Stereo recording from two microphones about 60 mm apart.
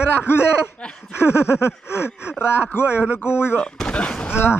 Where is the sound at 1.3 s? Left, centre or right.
Left.